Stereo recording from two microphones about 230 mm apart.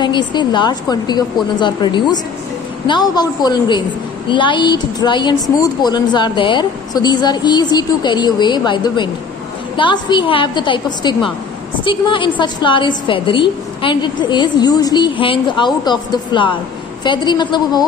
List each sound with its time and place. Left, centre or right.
0.0 s a woman's voice: centre